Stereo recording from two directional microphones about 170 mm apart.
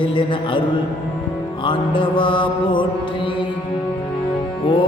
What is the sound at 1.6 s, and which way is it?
Music, 30° left (ahead or behind).